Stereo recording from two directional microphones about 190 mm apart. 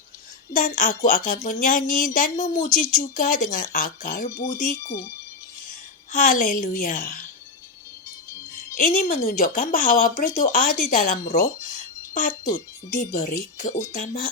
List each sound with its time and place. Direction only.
0.5 s speech: 45° left (ahead or behind)
6.1 s speech: 45° left (ahead or behind)
8.7 s speech: 45° left (ahead or behind)